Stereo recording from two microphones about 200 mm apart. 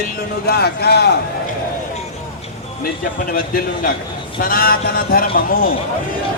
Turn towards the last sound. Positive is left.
turn(degrees=45)  # may be behind; listen again after turning